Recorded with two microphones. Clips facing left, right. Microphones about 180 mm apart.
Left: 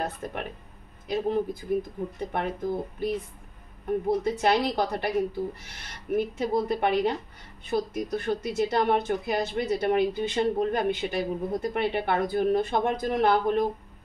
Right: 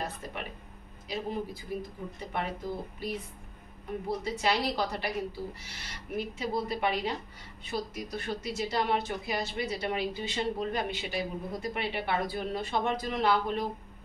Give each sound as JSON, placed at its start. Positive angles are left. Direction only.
{"t": 0.0, "sound": "speech", "side_deg": 50}
{"t": 4.2, "sound": "speech", "side_deg": 50}